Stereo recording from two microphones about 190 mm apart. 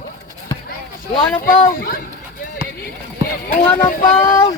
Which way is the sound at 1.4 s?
45° left (ahead or behind).